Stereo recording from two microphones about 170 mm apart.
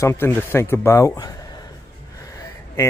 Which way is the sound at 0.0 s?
15° left (ahead or behind).